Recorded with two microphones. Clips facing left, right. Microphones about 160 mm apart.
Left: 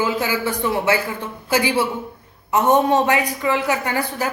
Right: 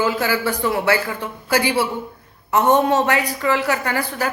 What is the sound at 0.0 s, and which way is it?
A man's voice, 20° left (ahead or behind).